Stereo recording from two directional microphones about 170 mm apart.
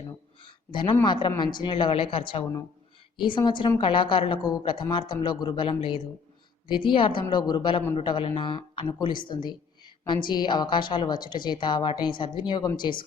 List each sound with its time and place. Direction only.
0.7 s speech: 30° left (ahead or behind)